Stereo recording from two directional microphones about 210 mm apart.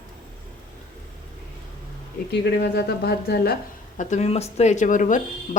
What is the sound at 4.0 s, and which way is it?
Speech, 35° left (ahead or behind).